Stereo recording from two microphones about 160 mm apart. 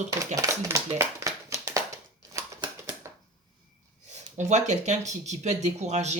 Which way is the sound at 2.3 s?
30° right (ahead or behind).